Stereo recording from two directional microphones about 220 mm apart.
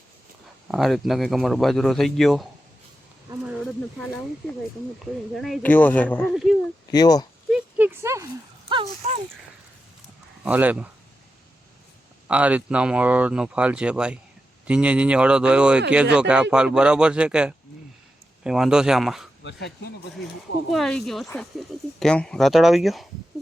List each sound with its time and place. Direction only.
0.7 s speech: centre (ahead or behind)
5.3 s speech: centre (ahead or behind)
6.9 s speech: 15° left (ahead or behind)
7.5 s a sound: 10° right (ahead or behind)
8.7 s speech: 30° right (ahead or behind)
10.4 s speech: 5° right (ahead or behind)
12.3 s speech: 5° right (ahead or behind)
19.4 s speech: 55° left (ahead or behind)
20.7 s speech: centre (ahead or behind)